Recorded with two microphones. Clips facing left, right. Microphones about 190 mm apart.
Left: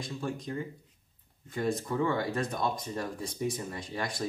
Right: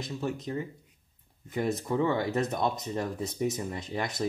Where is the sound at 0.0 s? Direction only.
20° right (ahead or behind).